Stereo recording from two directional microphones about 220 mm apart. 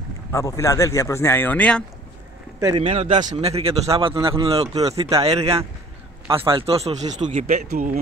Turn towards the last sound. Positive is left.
turn(degrees=-40)  # may be behind; listen again after turning